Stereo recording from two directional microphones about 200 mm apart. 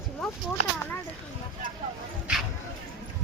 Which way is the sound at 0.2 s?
Centre (ahead or behind).